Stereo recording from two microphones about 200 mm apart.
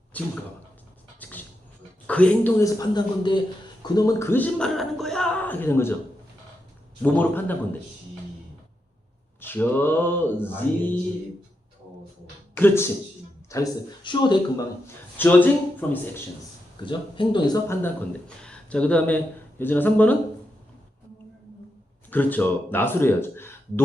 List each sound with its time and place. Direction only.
0.1 s speech: 5° left (ahead or behind)
1.2 s vehicle: 10° left (ahead or behind)
2.0 s speech: 5° left (ahead or behind)
7.0 s speech: 10° left (ahead or behind)
9.4 s speech: 10° left (ahead or behind)
12.5 s speech: 10° left (ahead or behind)
15.2 s speech: 10° left (ahead or behind)
16.8 s speech: 25° left (ahead or behind)
22.1 s speech: 10° left (ahead or behind)